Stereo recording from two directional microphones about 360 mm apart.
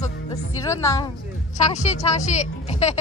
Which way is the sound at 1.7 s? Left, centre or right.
Centre.